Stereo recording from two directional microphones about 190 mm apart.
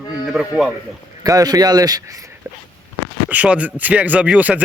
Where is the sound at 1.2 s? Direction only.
20° right (ahead or behind).